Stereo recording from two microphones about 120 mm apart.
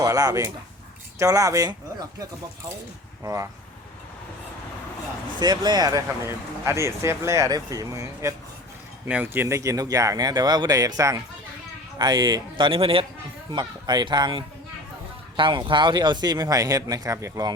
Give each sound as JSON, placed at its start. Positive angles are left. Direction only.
{"t": 0.0, "sound": "speech", "side_deg": -30}
{"t": 3.2, "sound": "speech", "side_deg": -25}
{"t": 5.4, "sound": "speech", "side_deg": -35}
{"t": 6.2, "sound": "speech", "side_deg": -20}
{"t": 9.0, "sound": "speech", "side_deg": -15}
{"t": 13.5, "sound": "speech", "side_deg": -40}